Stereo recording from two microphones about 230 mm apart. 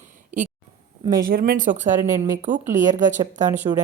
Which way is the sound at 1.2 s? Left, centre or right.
Right.